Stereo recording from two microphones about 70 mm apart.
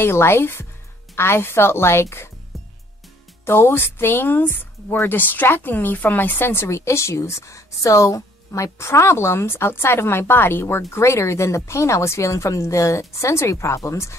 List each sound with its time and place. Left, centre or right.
0.0 s a woman's voice: left
3.4 s a woman's voice: left